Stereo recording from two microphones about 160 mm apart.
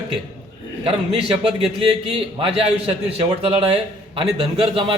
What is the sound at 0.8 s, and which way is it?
Speech, 35° right (ahead or behind).